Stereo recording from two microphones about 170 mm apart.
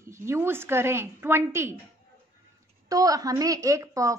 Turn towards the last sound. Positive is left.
turn(degrees=-20)  # may be behind; listen again after turning